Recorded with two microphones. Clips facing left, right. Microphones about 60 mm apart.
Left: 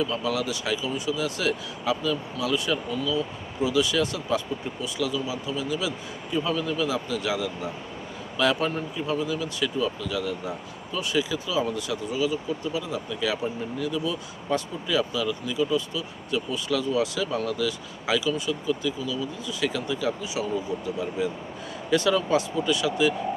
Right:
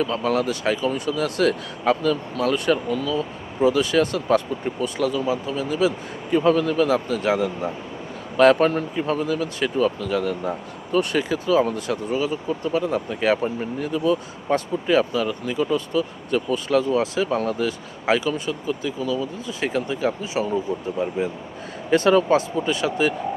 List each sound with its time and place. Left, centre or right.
0.0 s speech: right